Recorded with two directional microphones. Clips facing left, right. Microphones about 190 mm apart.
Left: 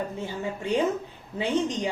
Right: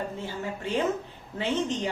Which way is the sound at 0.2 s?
15° left (ahead or behind).